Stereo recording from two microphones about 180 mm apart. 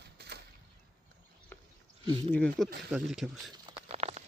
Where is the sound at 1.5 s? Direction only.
10° left (ahead or behind).